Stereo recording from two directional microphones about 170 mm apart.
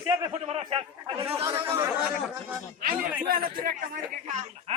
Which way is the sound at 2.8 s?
60° right (ahead or behind).